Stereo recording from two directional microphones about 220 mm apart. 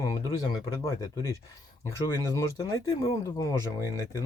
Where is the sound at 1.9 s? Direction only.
10° left (ahead or behind).